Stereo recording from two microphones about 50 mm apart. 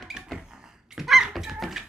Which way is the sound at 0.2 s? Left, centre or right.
Centre.